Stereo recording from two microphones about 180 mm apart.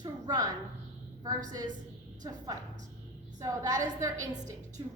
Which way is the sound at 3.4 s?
20° right (ahead or behind).